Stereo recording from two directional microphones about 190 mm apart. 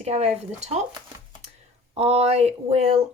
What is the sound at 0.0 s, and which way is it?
Speech, 35° right (ahead or behind).